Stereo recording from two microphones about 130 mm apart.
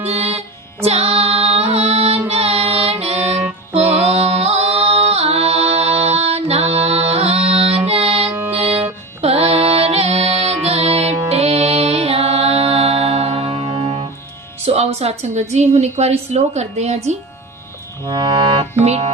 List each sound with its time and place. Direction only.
0.0 s music: 55° right (ahead or behind)
15.5 s a woman's voice: 55° right (ahead or behind)
18.0 s music: 30° right (ahead or behind)
18.3 s a woman's voice: 50° right (ahead or behind)